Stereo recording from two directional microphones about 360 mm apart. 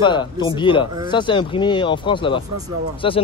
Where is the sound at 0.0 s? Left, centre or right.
Centre.